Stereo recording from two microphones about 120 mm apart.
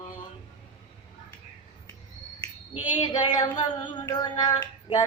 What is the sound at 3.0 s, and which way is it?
Music, 35° left (ahead or behind).